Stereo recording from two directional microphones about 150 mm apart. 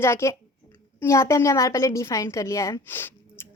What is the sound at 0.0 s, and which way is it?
A woman's voice, 20° left (ahead or behind).